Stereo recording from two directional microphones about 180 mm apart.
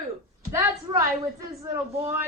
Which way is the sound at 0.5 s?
15° right (ahead or behind).